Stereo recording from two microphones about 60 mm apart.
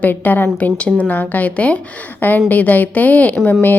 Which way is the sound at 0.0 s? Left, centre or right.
Left.